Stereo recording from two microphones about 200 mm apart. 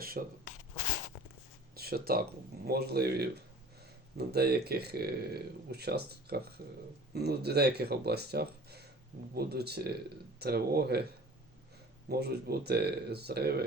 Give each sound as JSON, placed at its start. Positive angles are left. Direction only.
{"t": 0.0, "sound": "rub", "side_deg": -50}
{"t": 1.7, "sound": "a sound", "side_deg": -50}
{"t": 2.6, "sound": "speech", "side_deg": -50}
{"t": 12.0, "sound": "speech", "side_deg": -50}